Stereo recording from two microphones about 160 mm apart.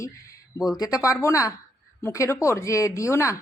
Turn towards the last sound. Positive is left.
turn(degrees=20)  # may be behind; listen again after turning